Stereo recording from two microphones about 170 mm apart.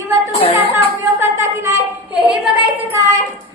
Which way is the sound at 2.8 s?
15° right (ahead or behind).